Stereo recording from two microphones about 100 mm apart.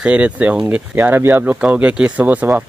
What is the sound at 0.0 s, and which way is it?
Speech, 15° right (ahead or behind).